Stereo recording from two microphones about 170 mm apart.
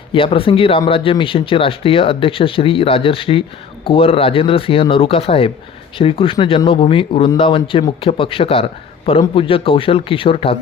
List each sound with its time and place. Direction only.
0.1 s speech: 30° left (ahead or behind)